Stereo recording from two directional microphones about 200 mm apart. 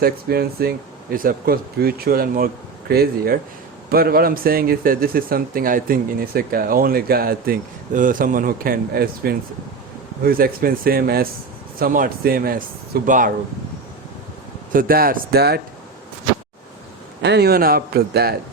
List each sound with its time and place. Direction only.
0.0 s speech: 50° right (ahead or behind)
14.7 s speech: 45° right (ahead or behind)
17.2 s speech: 55° right (ahead or behind)